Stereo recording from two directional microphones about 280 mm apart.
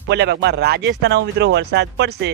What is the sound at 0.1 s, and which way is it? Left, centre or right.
Speech, right.